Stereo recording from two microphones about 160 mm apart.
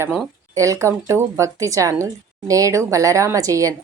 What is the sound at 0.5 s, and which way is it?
A woman's voice, 20° right (ahead or behind).